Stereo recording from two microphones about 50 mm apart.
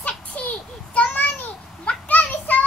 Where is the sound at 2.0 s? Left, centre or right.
Left.